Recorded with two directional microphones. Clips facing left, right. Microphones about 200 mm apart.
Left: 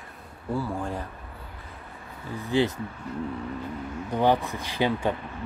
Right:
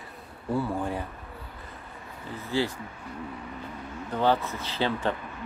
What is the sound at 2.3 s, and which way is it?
Speech, 15° left (ahead or behind).